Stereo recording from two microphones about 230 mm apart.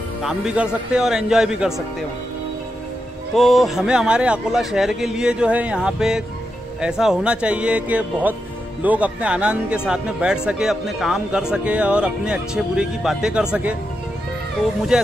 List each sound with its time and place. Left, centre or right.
0.2 s speech: centre
3.3 s speech: centre